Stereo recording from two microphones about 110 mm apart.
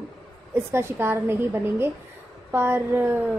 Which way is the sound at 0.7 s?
20° right (ahead or behind).